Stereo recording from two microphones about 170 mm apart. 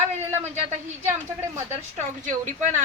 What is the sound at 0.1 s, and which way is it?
A man's voice, 40° right (ahead or behind).